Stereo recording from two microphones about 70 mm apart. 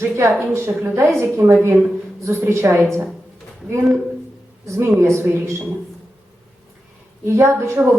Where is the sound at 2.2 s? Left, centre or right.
Right.